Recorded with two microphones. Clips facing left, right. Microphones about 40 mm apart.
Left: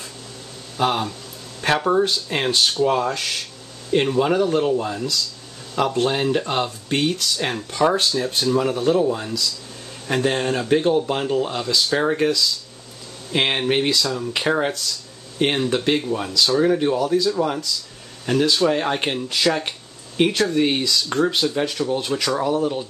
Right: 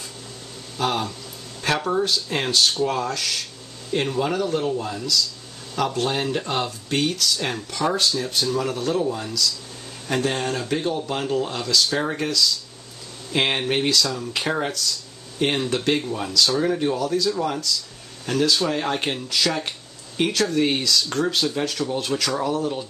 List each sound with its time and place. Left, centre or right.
0.7 s speech: centre
15.5 s speech: centre